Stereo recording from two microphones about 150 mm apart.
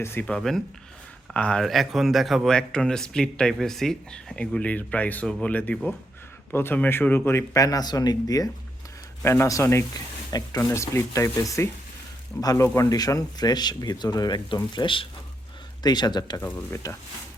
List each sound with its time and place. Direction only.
0.0 s speech: 15° left (ahead or behind)